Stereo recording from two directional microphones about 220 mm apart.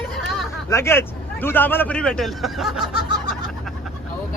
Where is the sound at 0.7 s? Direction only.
10° left (ahead or behind).